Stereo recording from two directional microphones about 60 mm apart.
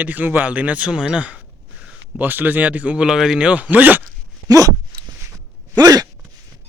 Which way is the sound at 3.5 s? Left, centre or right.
Right.